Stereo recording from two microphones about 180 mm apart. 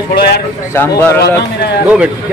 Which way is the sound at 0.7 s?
10° left (ahead or behind).